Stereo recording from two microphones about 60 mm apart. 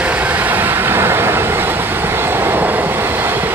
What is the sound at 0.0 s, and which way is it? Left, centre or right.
Vehicle, right.